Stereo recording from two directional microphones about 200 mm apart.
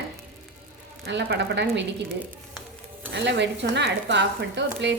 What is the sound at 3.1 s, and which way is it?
Speech, 60° right (ahead or behind).